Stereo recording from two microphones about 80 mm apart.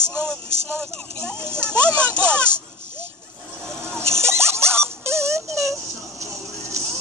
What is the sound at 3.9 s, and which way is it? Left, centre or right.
Music, right.